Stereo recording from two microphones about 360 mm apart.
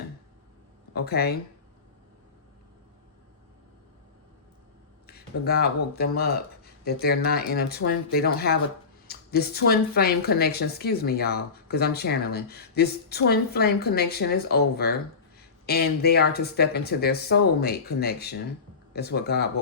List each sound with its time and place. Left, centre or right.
0.9 s speech: left
5.0 s speech: left